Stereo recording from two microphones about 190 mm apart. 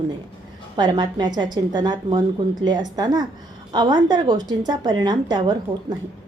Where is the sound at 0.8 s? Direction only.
25° right (ahead or behind).